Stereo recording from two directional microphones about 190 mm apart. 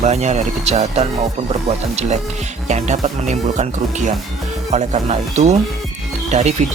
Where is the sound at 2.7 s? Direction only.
40° right (ahead or behind).